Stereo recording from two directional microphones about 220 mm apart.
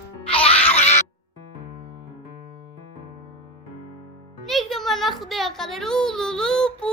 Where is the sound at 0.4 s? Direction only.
25° left (ahead or behind).